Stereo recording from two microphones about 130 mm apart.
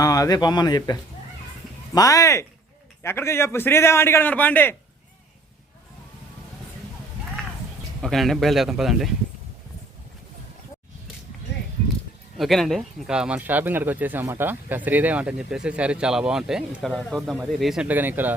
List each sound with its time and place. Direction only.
0.0 s speech: 30° left (ahead or behind)
2.0 s a man's voice: 25° left (ahead or behind)
8.0 s speech: centre (ahead or behind)
12.4 s speech: centre (ahead or behind)
17.8 s speech: 15° right (ahead or behind)